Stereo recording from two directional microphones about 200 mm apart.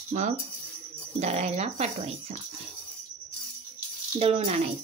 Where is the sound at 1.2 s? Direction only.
30° right (ahead or behind).